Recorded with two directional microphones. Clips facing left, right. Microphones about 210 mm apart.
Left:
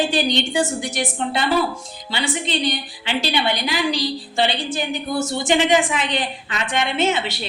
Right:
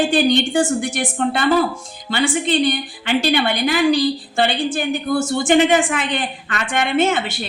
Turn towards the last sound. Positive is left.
turn(degrees=-50)  # may be behind; listen again after turning